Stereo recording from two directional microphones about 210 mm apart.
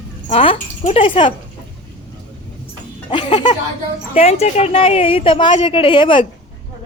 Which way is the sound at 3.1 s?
20° left (ahead or behind).